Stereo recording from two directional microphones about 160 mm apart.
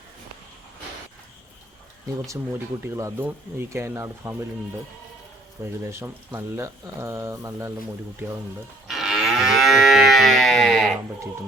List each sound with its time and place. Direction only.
2.2 s speech: 15° right (ahead or behind)
5.6 s speech: 15° right (ahead or behind)
8.9 s livestock: centre (ahead or behind)